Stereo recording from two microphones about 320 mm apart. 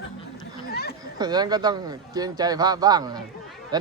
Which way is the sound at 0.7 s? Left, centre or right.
Left.